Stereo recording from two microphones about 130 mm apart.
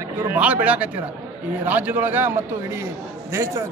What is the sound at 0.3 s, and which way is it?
A man's voice, 10° right (ahead or behind).